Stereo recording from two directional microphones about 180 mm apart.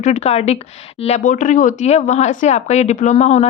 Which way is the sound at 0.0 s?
40° left (ahead or behind).